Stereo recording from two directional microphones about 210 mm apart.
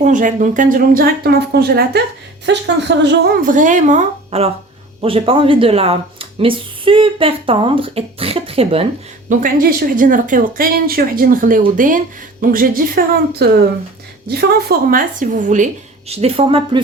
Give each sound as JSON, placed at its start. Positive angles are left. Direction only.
{"t": 0.0, "sound": "speech", "side_deg": -35}
{"t": 9.3, "sound": "speech", "side_deg": -40}